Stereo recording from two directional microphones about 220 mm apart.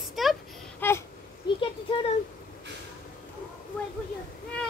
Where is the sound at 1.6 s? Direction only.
25° left (ahead or behind).